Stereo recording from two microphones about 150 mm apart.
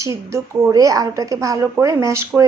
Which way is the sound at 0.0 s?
20° right (ahead or behind).